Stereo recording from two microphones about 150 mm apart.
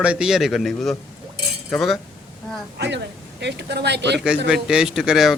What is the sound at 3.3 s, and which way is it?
Speech, 90° right.